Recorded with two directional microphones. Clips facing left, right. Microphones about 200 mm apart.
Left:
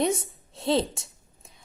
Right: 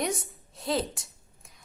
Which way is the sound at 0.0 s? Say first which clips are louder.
Left 6 dB; 25° left (ahead or behind).